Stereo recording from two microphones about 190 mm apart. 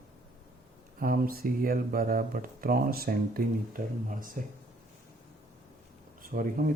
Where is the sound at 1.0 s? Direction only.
50° right (ahead or behind).